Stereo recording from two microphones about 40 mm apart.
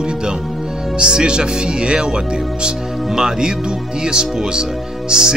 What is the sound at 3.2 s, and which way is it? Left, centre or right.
Speech, centre.